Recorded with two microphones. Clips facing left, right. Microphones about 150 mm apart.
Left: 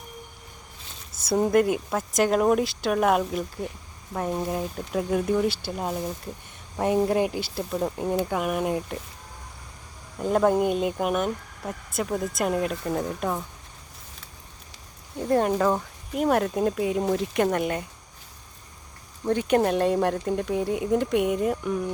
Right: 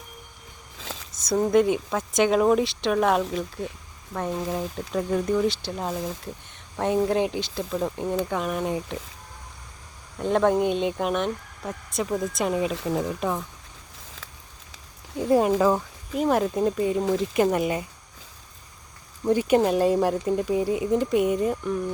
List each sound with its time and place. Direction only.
0.8 s a sound: 90° right
1.1 s speech: 5° left (ahead or behind)
10.2 s speech: 5° left (ahead or behind)
15.2 s speech: 10° right (ahead or behind)
19.2 s speech: 5° right (ahead or behind)